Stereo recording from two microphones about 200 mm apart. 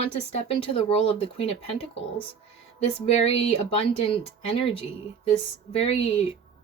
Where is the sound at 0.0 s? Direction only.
30° left (ahead or behind).